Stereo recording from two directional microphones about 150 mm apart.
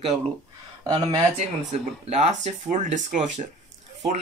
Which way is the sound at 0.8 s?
30° right (ahead or behind).